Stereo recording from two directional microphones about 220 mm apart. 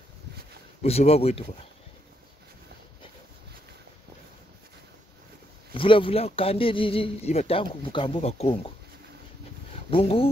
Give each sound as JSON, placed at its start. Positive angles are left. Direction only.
{"t": 0.8, "sound": "a man's voice", "side_deg": 25}
{"t": 5.8, "sound": "a man's voice", "side_deg": 25}
{"t": 9.8, "sound": "a man's voice", "side_deg": 25}